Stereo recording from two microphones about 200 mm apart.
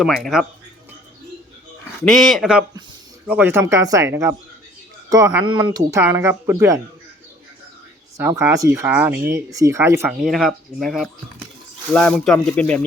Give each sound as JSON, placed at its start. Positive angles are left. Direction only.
{"t": 0.0, "sound": "speech", "side_deg": 0}
{"t": 2.0, "sound": "speech", "side_deg": 0}
{"t": 8.2, "sound": "speech", "side_deg": -10}
{"t": 10.1, "sound": "speech", "side_deg": 0}